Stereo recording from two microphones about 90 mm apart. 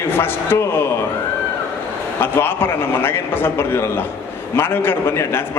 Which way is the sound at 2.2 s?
25° left (ahead or behind).